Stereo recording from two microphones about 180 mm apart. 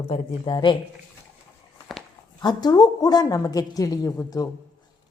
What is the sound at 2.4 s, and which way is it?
A woman's voice, 25° left (ahead or behind).